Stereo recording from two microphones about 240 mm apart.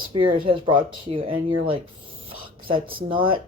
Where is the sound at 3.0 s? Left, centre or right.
Right.